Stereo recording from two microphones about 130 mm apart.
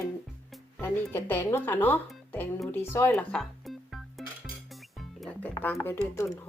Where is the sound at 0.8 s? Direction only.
15° left (ahead or behind).